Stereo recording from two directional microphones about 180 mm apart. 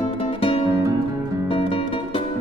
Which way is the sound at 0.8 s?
20° right (ahead or behind).